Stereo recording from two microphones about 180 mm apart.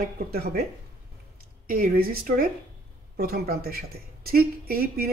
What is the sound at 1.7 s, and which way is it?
A woman's voice, 50° right (ahead or behind).